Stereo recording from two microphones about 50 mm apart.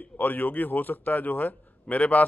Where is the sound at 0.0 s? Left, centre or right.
Left.